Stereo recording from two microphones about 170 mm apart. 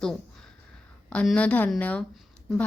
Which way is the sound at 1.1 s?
5° left (ahead or behind).